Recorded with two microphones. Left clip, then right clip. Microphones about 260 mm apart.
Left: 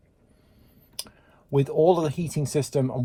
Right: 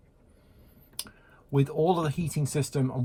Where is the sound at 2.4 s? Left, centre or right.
Left.